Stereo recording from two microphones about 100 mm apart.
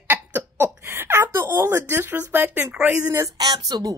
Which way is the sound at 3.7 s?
40° right (ahead or behind).